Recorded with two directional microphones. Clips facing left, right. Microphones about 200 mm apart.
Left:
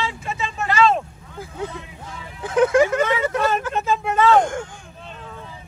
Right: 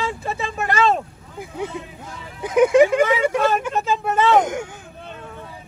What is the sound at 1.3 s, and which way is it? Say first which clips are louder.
Speech: right 2 dB; 15° right (ahead or behind).